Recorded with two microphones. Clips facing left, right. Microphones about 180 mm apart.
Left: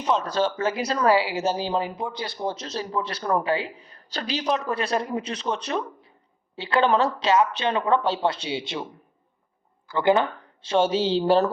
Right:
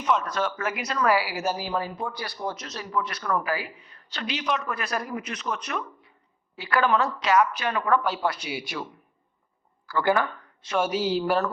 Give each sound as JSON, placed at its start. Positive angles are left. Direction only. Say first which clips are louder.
{"t": 0.0, "sound": "speech", "louder": "left 2 dB", "side_deg": 30}